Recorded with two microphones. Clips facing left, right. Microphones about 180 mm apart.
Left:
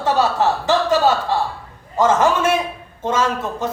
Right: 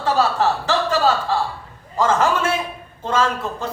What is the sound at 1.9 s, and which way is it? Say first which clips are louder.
Speech: left 3 dB; 20° left (ahead or behind).